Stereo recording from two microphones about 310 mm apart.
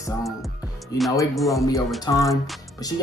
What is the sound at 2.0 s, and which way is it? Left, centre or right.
Speech, centre.